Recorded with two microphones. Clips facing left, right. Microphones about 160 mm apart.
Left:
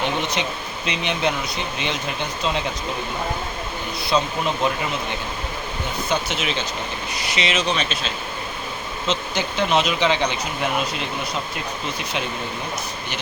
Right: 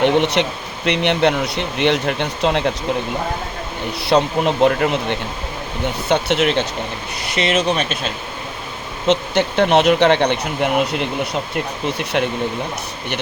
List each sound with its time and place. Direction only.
0.0 s speech: 70° right (ahead or behind)
4.0 s speech: 70° right (ahead or behind); by 8.1 s 50° right (ahead or behind)
9.0 s speech: 65° right (ahead or behind)